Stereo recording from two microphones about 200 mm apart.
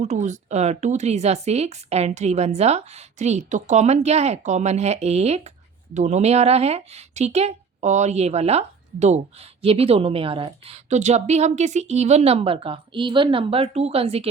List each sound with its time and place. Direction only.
0.0 s speech: 35° right (ahead or behind)